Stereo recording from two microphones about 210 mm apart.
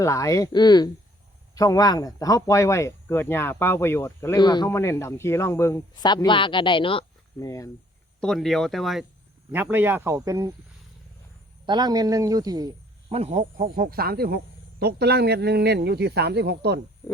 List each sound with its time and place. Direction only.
0.0 s speech: 15° left (ahead or behind)
8.2 s speech: centre (ahead or behind); by 10.5 s 15° right (ahead or behind)
11.6 s speech: 20° right (ahead or behind)
13.1 s speech: 30° right (ahead or behind); by 16.8 s 50° right (ahead or behind)